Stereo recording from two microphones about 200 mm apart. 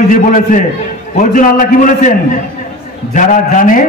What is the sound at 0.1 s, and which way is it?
A man's voice, 40° left (ahead or behind).